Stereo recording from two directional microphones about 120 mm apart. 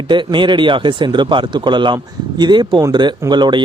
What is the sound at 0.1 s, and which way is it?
A man's voice, 40° right (ahead or behind).